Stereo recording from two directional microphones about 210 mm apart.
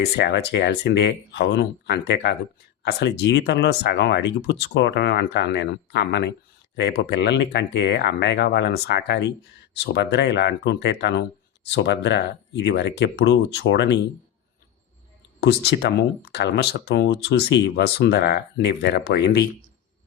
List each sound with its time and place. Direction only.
0.0 s speech: 50° left (ahead or behind)
15.4 s speech: 50° left (ahead or behind)